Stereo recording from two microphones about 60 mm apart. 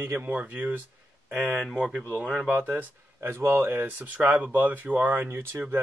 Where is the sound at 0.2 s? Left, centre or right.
Right.